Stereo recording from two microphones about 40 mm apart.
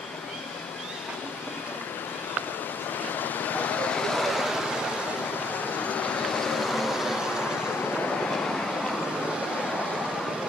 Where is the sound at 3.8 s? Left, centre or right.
Left.